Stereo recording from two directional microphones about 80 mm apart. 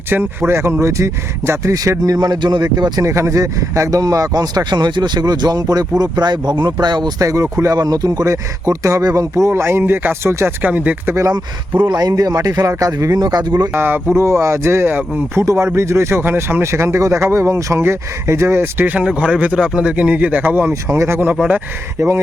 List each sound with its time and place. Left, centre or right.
0.1 s speech: right
2.6 s speech: right
3.0 s speech: right
7.2 s speech: right
8.2 s speech: right
9.5 s speech: right
11.3 s speech: right
11.9 s speech: right
13.2 s speech: right
13.7 s speech: right
14.2 s speech: right
15.4 s speech: right
20.8 s speech: right